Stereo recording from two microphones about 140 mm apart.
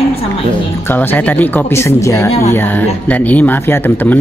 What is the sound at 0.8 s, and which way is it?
Speech, 15° left (ahead or behind).